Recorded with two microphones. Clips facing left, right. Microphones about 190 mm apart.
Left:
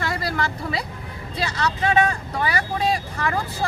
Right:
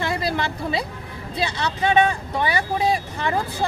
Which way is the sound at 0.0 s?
25° right (ahead or behind).